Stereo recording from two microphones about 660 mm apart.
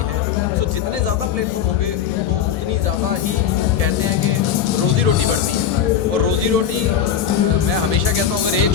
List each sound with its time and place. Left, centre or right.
6.1 s speech: right